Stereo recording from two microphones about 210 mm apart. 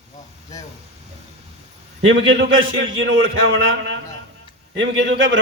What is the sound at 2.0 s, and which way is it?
A man's voice, 60° right (ahead or behind).